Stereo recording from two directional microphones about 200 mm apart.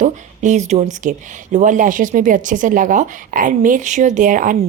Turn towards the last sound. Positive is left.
turn(degrees=-40)  # may be behind; listen again after turning